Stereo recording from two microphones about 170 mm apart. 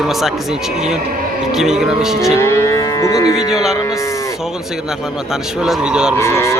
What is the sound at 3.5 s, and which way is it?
Speech, 5° right (ahead or behind).